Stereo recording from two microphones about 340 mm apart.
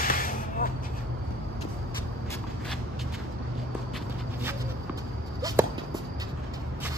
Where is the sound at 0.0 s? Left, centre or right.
Left.